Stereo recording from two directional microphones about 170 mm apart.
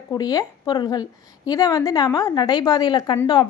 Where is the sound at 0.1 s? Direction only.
20° left (ahead or behind).